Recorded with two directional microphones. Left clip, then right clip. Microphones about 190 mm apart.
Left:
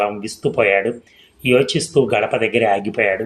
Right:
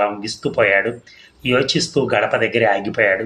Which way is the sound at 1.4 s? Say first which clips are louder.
Left 2 dB; 40° left (ahead or behind).